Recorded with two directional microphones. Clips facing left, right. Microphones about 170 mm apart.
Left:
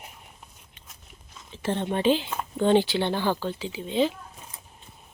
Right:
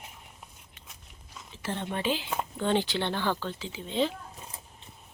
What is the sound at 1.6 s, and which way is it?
Speech, 25° left (ahead or behind).